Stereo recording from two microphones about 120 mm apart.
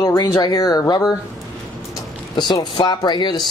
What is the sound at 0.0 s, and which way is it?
Speech, 30° left (ahead or behind).